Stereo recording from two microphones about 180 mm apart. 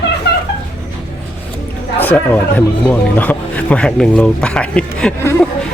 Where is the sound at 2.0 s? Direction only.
10° left (ahead or behind).